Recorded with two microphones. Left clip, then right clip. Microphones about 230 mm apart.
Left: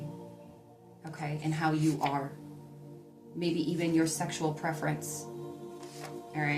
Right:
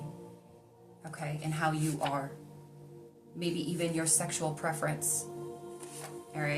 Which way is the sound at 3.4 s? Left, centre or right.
Centre.